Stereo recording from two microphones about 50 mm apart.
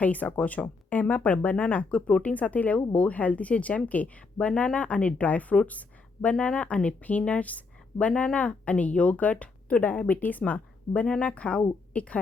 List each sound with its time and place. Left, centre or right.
0.0 s speech: left